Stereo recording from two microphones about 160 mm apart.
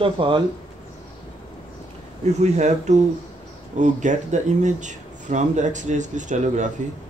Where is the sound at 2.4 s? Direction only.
45° right (ahead or behind).